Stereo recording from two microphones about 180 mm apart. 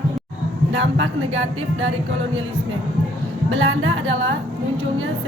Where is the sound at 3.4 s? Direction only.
90° right.